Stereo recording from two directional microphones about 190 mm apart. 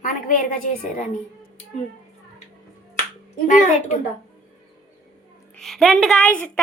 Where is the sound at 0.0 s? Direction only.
45° left (ahead or behind).